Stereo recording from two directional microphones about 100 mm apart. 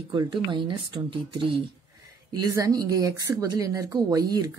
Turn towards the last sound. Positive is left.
turn(degrees=-40)  # may be behind; listen again after turning